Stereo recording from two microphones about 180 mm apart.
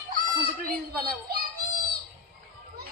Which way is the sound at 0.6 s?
55° right (ahead or behind).